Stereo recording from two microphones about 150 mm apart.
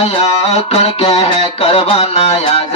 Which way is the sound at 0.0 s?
45° left (ahead or behind).